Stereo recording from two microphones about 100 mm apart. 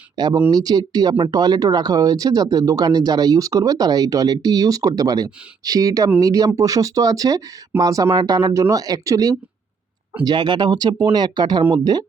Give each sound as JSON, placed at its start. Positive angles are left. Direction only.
{"t": 0.2, "sound": "speech", "side_deg": -45}
{"t": 10.2, "sound": "speech", "side_deg": -50}